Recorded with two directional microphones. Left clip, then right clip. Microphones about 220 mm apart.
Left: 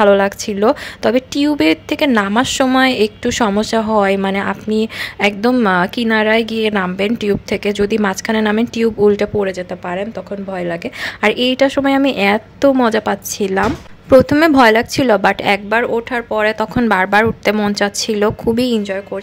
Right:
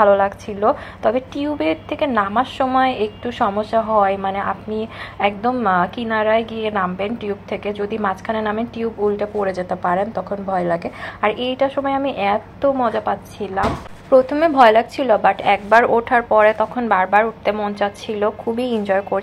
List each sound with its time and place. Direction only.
0.0 s a woman's voice: 45° left (ahead or behind)
9.5 s speech: 30° left (ahead or behind)
11.1 s a woman's voice: 45° left (ahead or behind)
15.7 s speech: 35° left (ahead or behind)
16.7 s a woman's voice: 50° left (ahead or behind)
18.8 s speech: 30° left (ahead or behind)